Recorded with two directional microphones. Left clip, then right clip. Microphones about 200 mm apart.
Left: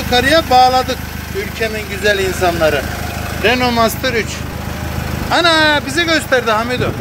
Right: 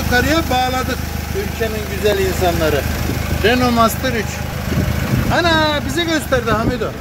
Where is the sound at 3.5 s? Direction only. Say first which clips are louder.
Left 1 dB; 20° right (ahead or behind).